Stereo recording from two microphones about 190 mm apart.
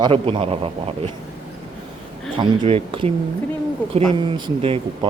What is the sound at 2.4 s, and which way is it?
A man's voice, 30° right (ahead or behind).